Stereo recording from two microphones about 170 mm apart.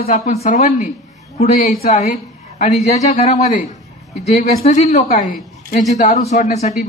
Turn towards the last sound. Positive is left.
turn(degrees=40)  # may be behind; listen again after turning